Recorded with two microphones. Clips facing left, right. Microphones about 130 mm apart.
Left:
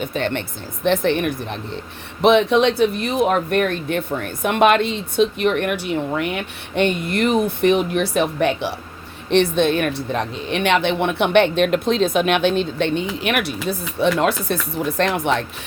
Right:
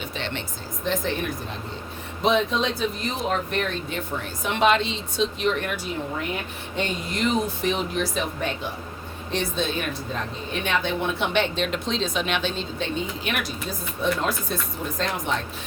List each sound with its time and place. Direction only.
0.0 s speech: 50° left (ahead or behind)
0.9 s a woman's voice: 70° left (ahead or behind)
9.3 s a woman's voice: 60° left (ahead or behind)